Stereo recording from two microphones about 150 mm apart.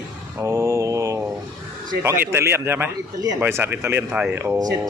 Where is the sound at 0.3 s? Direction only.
20° right (ahead or behind).